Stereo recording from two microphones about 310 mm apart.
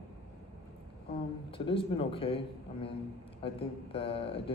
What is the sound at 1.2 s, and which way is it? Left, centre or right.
A man's voice, centre.